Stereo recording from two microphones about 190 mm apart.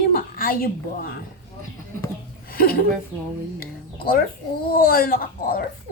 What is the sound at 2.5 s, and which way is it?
Speech, 50° left (ahead or behind).